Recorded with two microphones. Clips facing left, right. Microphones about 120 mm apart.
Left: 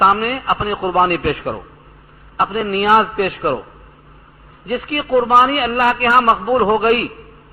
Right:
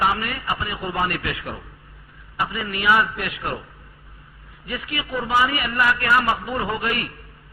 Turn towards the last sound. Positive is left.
turn(degrees=50)  # may be behind; listen again after turning